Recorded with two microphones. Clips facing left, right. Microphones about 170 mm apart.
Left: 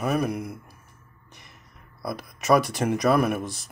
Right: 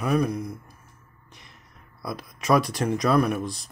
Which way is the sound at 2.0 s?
Centre (ahead or behind).